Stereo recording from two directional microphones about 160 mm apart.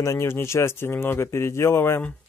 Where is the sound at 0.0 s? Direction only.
20° left (ahead or behind).